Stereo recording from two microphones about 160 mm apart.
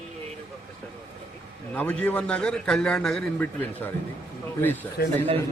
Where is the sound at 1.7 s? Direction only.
10° left (ahead or behind).